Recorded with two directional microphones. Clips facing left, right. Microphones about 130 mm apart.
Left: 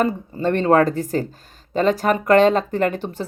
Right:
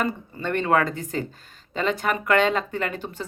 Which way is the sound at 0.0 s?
35° left (ahead or behind).